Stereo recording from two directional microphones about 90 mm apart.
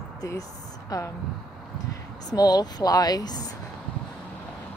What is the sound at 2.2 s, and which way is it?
Speech, 45° left (ahead or behind).